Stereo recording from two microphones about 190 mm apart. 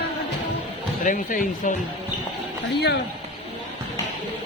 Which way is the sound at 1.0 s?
45° left (ahead or behind).